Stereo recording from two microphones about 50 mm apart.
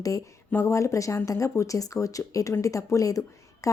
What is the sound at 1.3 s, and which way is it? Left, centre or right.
A woman's voice, left.